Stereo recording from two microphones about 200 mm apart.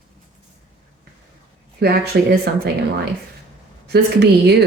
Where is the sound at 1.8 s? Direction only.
50° right (ahead or behind).